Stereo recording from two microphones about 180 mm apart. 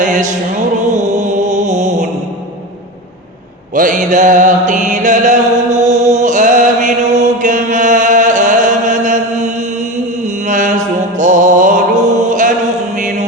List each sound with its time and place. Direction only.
0.0 s music: 45° right (ahead or behind)
0.9 s mantra: 40° right (ahead or behind)
3.8 s mantra: 45° right (ahead or behind)
11.2 s music: 45° right (ahead or behind)
12.2 s mantra: 45° right (ahead or behind)